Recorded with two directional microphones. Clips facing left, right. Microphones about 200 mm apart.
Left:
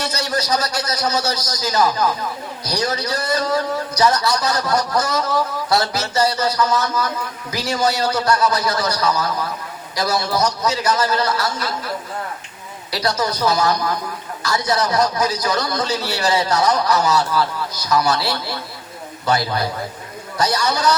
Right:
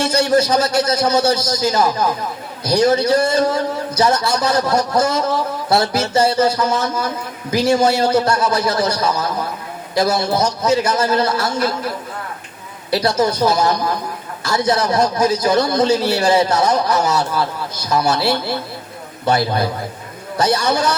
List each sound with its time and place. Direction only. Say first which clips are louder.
0.0 s a man's voice: right 8 dB; 25° right (ahead or behind)
13.0 s a man's voice: right 4 dB; 25° right (ahead or behind)